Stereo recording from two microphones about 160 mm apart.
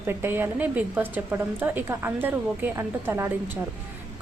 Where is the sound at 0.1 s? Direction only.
15° right (ahead or behind).